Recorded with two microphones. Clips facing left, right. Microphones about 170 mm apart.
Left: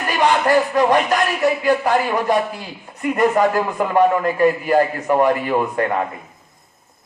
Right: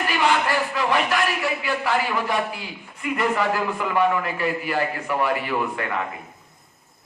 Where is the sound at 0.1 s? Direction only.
45° left (ahead or behind).